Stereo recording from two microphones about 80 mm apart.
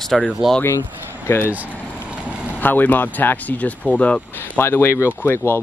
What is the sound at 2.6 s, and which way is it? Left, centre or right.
Speech, left.